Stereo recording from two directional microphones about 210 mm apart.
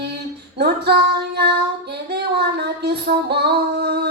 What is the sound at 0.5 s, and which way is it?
Female singing, 50° right (ahead or behind).